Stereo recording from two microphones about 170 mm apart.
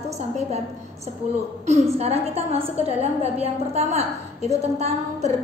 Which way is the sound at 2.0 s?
35° right (ahead or behind).